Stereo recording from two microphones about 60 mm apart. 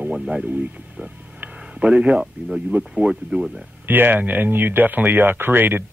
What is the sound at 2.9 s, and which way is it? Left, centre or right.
Speech, centre.